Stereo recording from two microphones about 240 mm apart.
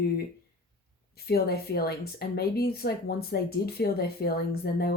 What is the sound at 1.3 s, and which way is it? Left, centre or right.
Speech, left.